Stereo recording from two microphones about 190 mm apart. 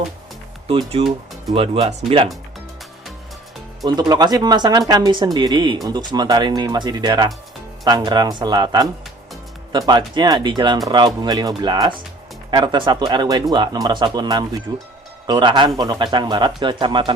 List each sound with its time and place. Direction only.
0.7 s speech: 25° right (ahead or behind)
3.8 s speech: 20° right (ahead or behind)